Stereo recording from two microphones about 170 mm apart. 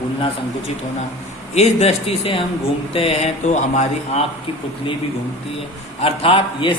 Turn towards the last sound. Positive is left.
turn(degrees=30)  # may be behind; listen again after turning